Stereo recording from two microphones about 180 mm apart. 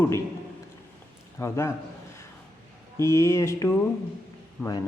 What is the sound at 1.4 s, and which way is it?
Speech, 15° left (ahead or behind).